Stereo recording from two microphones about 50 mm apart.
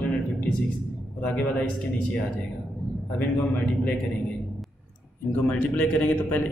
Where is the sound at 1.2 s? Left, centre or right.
Left.